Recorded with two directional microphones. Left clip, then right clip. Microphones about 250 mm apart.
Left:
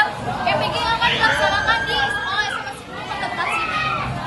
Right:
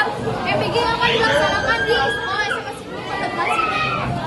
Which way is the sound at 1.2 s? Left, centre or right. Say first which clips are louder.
Even; centre.